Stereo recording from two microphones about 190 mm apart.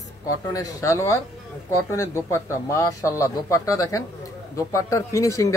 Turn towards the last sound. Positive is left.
turn(degrees=15)  # may be behind; listen again after turning